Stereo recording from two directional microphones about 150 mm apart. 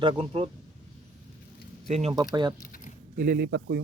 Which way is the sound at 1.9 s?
50° right (ahead or behind).